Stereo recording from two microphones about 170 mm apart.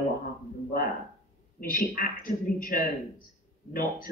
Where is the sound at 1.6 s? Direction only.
55° left (ahead or behind).